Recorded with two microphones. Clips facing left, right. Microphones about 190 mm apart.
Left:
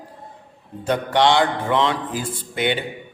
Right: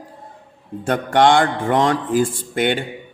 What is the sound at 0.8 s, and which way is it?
Speech, 50° right (ahead or behind).